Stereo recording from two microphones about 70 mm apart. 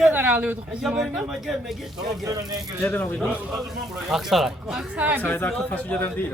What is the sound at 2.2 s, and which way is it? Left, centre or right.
Speech, right.